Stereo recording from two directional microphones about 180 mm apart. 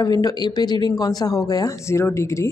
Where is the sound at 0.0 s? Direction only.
20° left (ahead or behind).